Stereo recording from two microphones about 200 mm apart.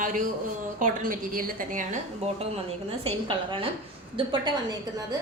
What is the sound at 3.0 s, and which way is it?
A woman's voice, 25° right (ahead or behind).